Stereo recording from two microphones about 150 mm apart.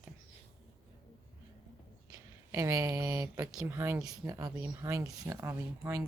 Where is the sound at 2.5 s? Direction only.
20° right (ahead or behind).